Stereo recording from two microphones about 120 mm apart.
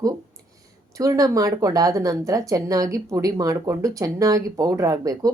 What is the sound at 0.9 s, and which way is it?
Speech, 30° right (ahead or behind).